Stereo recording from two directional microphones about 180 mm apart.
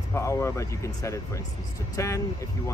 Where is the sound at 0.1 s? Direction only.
15° left (ahead or behind).